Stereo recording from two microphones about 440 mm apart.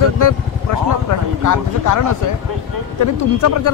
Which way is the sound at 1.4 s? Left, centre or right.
Left.